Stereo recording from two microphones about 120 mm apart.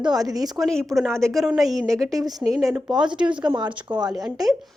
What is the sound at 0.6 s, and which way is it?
Speech, 5° left (ahead or behind).